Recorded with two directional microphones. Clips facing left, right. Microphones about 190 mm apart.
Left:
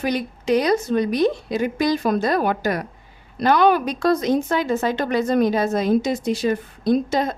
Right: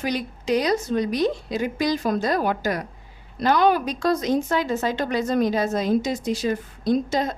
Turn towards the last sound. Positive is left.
turn(degrees=55)  # may be behind; listen again after turning